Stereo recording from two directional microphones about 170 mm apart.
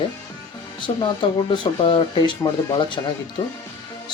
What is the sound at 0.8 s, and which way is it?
Speech, 30° left (ahead or behind).